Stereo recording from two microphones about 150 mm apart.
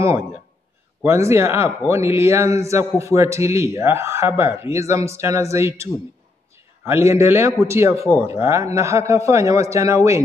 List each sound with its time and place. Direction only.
1.0 s a man's voice: 20° right (ahead or behind)